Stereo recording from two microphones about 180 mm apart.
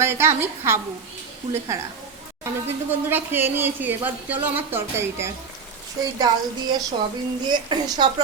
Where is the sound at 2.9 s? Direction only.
10° right (ahead or behind).